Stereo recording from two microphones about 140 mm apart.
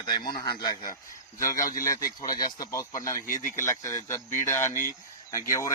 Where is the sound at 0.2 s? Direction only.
90° left.